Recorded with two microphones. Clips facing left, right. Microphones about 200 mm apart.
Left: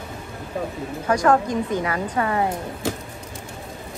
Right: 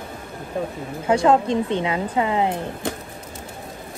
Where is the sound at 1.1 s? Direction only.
25° right (ahead or behind).